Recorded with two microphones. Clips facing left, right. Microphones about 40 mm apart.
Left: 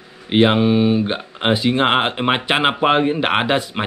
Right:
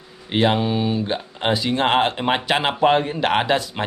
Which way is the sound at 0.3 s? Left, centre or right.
Left.